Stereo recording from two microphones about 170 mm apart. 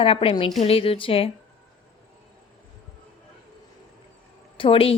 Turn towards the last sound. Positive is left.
turn(degrees=35)  # may be behind; listen again after turning